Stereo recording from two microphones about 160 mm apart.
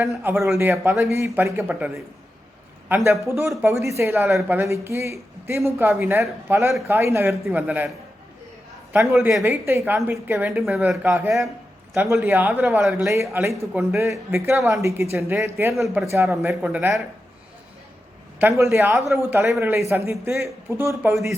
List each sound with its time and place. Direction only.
0.4 s speech: 15° right (ahead or behind)
8.9 s speech: 10° right (ahead or behind)
11.9 s speech: 15° right (ahead or behind)
18.3 s speech: 15° right (ahead or behind)